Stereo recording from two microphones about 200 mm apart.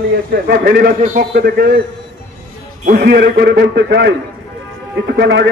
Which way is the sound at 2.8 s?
50° right (ahead or behind).